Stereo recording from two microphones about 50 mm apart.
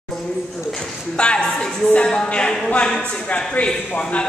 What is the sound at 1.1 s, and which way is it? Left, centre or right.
A man's voice, centre.